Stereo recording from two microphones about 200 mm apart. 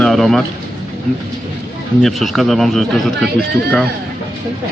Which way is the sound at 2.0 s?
Centre (ahead or behind).